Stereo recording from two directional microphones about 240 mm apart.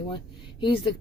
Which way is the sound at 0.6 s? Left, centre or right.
Centre.